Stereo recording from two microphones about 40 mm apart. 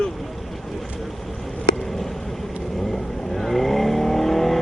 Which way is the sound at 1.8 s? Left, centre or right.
Centre.